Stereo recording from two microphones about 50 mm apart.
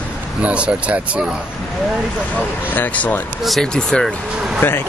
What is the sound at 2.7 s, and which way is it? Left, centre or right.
Speech, left.